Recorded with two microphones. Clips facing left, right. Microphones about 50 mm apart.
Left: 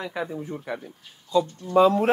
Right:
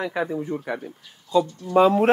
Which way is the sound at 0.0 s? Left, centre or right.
Centre.